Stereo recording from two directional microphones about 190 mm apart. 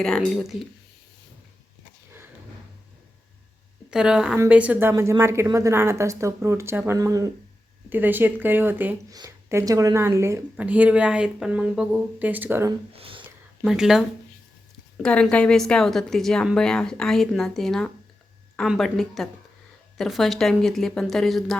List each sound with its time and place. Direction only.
0.0 s a woman's voice: centre (ahead or behind)
3.8 s a woman's voice: 5° right (ahead or behind)
13.0 s whispering: 30° right (ahead or behind)
13.6 s a woman's voice: 5° right (ahead or behind)